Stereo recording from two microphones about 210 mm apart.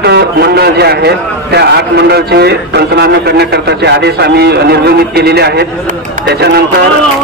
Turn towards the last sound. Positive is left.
turn(degrees=-50)  # may be behind; listen again after turning